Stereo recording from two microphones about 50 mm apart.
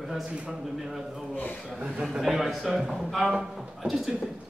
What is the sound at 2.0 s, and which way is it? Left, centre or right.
A man's voice, centre.